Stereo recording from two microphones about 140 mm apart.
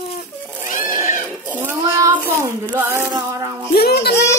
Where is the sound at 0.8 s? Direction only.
20° right (ahead or behind).